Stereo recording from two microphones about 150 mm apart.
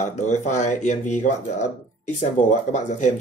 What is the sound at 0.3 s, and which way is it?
Speech, 50° left (ahead or behind).